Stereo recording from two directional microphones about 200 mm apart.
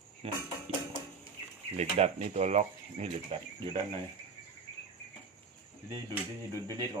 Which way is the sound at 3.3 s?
25° right (ahead or behind).